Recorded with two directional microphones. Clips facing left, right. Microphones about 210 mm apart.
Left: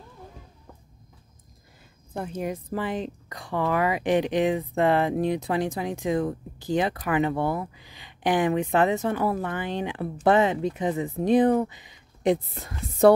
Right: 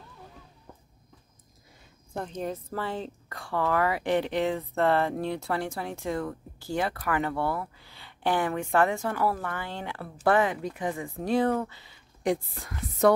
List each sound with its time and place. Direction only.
2.1 s speech: 10° left (ahead or behind); by 13.1 s 25° left (ahead or behind)